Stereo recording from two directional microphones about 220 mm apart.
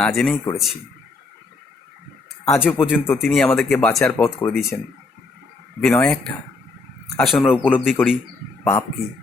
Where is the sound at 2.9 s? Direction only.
5° left (ahead or behind).